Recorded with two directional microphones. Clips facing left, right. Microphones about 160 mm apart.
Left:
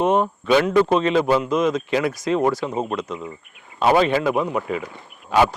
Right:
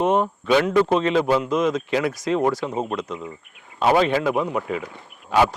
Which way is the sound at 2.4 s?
25° left (ahead or behind).